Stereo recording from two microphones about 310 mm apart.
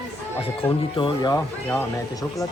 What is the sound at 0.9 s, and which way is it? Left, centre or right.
Speech, centre.